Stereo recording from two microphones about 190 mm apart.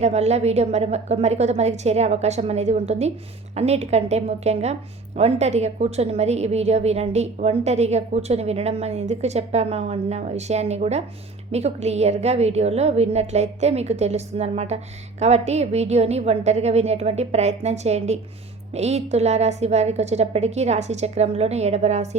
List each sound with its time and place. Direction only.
0.0 s a woman's voice: 35° right (ahead or behind)